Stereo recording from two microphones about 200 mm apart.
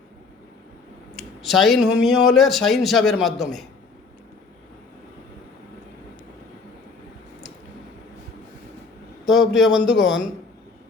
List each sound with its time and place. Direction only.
1.4 s a man's voice: centre (ahead or behind)
9.2 s a man's voice: centre (ahead or behind)